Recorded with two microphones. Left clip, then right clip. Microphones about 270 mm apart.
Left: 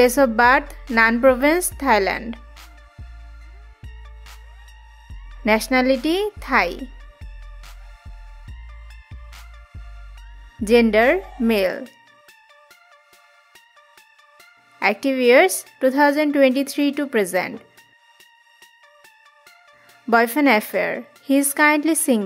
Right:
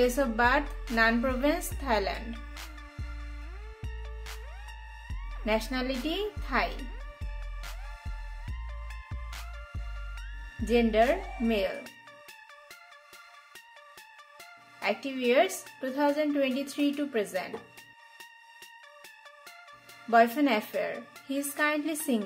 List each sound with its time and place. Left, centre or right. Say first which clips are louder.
0.0 s a woman's voice: left 11 dB; left
5.4 s a woman's voice: left 12 dB; left
10.6 s a woman's voice: left 10 dB; left
14.8 s a woman's voice: left 12 dB; left
20.1 s a woman's voice: left 7 dB; left